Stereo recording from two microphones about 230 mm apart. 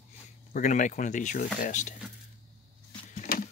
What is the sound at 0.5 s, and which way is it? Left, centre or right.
Speech, left.